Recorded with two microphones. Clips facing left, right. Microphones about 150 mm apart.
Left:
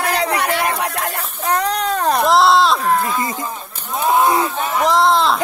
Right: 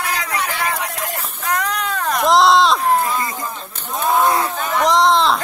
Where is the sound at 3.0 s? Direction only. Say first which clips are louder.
Left 1 dB; 20° left (ahead or behind).